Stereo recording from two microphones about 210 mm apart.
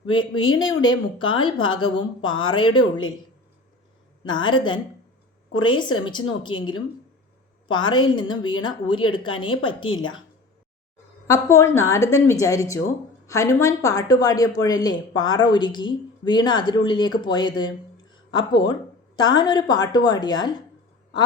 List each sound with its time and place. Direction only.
0.1 s speech: 20° left (ahead or behind)
4.4 s speech: 20° left (ahead or behind)
9.9 s a woman's voice: 70° left (ahead or behind)
11.3 s a woman's voice: 15° left (ahead or behind)